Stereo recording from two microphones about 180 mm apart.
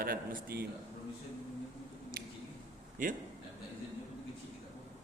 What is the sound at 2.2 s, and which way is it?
Squish, 55° right (ahead or behind).